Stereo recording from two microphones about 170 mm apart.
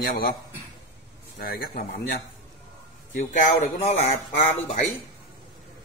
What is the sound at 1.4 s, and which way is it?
Speech, 60° left (ahead or behind).